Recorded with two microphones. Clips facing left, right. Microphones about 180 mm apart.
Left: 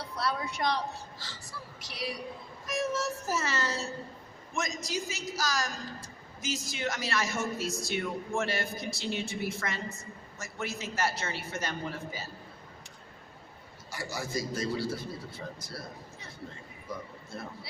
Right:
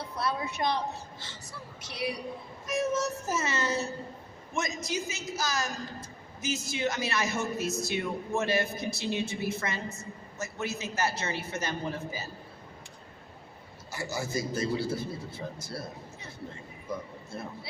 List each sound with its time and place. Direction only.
0.2 s a woman's voice: 20° right (ahead or behind)
1.8 s a man's voice: 20° right (ahead or behind)
13.9 s a man's voice: 25° right (ahead or behind)